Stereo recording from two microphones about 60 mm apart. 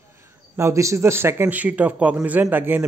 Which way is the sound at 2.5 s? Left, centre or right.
Right.